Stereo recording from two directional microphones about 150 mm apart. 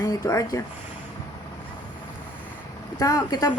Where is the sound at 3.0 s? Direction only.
25° left (ahead or behind).